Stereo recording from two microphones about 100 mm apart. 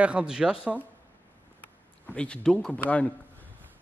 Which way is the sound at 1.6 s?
15° left (ahead or behind).